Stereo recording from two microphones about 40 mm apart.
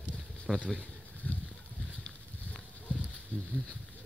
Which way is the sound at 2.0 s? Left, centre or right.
Left.